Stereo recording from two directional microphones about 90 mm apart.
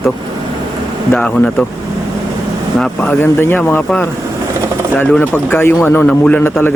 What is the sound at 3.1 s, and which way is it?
Speech, 25° left (ahead or behind).